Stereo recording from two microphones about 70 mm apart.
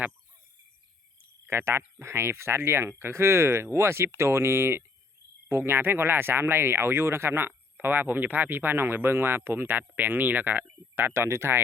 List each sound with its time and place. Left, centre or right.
1.5 s speech: right